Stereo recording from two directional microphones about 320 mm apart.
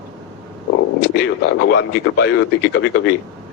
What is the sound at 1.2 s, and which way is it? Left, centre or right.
Speech, left.